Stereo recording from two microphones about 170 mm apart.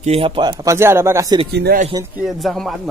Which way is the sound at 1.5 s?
75° right (ahead or behind).